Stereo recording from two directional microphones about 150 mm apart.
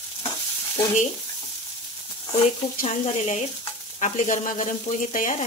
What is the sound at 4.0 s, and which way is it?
Speech, 55° left (ahead or behind).